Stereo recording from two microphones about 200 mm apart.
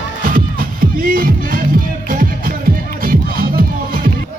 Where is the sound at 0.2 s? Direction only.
45° right (ahead or behind).